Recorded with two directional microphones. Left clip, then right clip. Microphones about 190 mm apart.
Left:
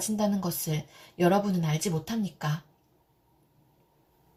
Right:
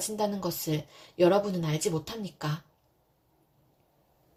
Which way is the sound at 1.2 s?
45° right (ahead or behind).